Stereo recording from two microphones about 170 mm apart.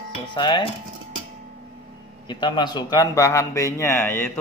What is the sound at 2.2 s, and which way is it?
A man's voice, 25° left (ahead or behind).